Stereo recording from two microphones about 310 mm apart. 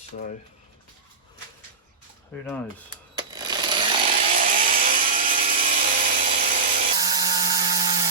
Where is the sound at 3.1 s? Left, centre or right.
Centre.